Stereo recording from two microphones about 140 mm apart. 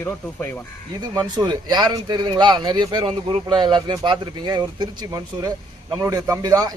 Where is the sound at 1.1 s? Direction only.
30° right (ahead or behind).